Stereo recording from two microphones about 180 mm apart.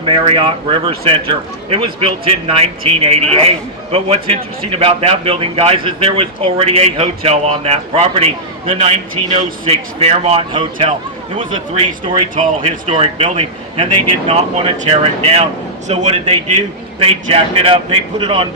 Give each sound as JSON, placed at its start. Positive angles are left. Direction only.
{"t": 0.0, "sound": "a man's voice", "side_deg": -30}